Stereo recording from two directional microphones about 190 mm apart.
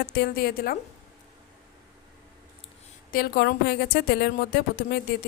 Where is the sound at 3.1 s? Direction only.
50° left (ahead or behind).